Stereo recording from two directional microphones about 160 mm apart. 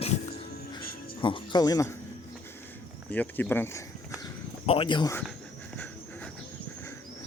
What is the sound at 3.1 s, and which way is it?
Speech, 10° left (ahead or behind).